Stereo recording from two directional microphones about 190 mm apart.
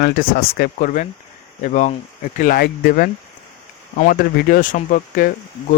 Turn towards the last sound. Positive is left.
turn(degrees=45)  # may be behind; listen again after turning